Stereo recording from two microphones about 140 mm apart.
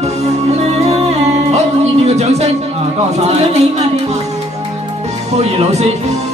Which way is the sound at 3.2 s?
50° right (ahead or behind).